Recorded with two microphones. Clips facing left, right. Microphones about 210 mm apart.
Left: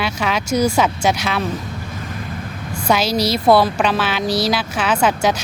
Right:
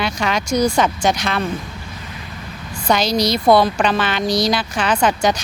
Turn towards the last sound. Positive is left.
turn(degrees=5)  # may be behind; listen again after turning